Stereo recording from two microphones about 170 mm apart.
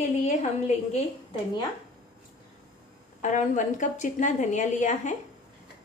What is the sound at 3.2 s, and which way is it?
A woman's voice, 45° left (ahead or behind).